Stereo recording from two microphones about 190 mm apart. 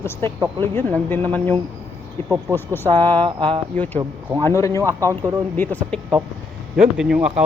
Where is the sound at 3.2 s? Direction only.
25° right (ahead or behind).